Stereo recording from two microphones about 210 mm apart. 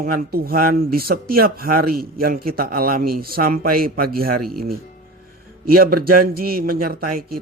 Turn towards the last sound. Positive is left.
turn(degrees=-45)  # may be behind; listen again after turning